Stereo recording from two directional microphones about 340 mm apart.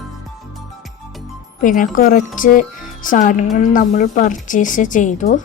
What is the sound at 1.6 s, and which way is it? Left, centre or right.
A woman's voice, left.